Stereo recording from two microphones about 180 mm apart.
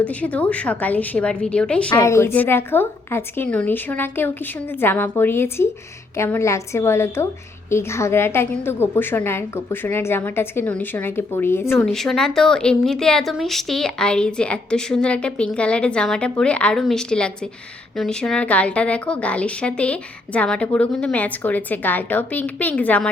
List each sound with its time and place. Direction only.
0.0 s a woman's voice: 10° left (ahead or behind)
11.9 s a woman's voice: centre (ahead or behind)